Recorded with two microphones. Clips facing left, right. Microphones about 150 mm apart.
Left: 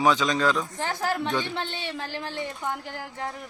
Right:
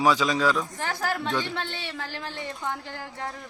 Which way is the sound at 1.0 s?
20° left (ahead or behind).